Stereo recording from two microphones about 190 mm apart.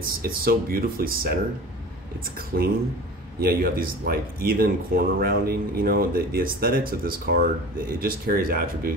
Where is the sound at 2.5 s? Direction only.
55° right (ahead or behind).